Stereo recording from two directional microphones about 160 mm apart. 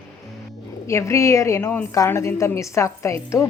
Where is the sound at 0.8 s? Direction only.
20° left (ahead or behind).